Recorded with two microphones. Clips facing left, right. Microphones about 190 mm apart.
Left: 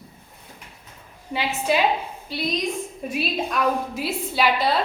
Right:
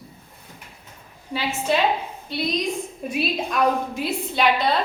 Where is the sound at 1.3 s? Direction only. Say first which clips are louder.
Even; 20° left (ahead or behind).